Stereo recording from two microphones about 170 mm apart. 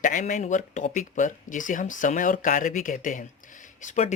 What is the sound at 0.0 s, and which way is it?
Speech, 50° left (ahead or behind).